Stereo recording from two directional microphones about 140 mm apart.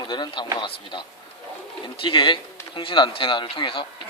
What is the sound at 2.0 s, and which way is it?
Speech, 35° left (ahead or behind).